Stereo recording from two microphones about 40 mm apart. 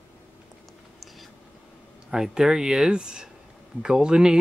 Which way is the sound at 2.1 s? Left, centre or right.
Centre.